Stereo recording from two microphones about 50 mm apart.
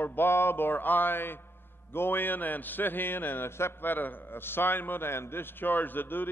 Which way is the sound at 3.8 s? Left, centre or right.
Left.